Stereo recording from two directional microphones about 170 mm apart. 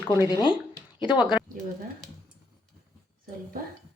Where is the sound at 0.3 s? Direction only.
25° left (ahead or behind).